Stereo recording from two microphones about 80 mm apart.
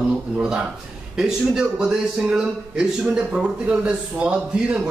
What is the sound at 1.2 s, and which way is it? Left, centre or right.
A man's voice, centre.